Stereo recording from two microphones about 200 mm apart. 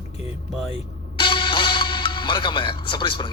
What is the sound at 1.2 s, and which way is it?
Music, 25° left (ahead or behind).